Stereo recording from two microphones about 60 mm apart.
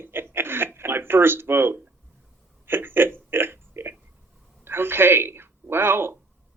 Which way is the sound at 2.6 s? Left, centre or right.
Right.